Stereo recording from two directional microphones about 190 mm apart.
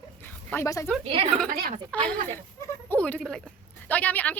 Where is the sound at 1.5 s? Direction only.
50° right (ahead or behind).